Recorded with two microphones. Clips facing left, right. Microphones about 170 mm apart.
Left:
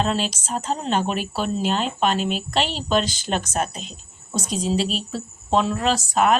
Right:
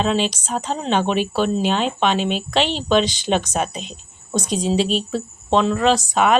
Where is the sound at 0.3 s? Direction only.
5° left (ahead or behind).